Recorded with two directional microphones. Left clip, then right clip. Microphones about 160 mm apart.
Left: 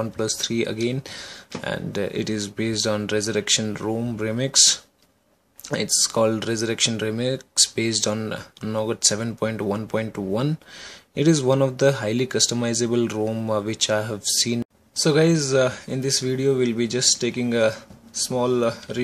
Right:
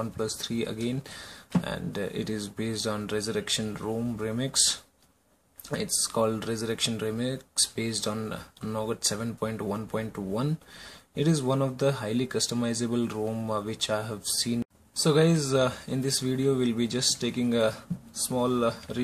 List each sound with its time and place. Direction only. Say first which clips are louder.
0.0 s speech: left 7 dB; 35° left (ahead or behind)
15.0 s speech: left 5 dB; 25° left (ahead or behind)